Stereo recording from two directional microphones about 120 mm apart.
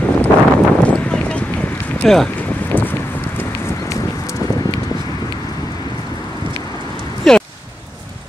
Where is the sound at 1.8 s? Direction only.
10° left (ahead or behind).